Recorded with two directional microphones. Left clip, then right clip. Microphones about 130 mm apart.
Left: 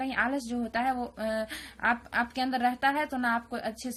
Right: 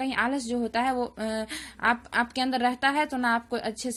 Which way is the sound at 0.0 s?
30° right (ahead or behind).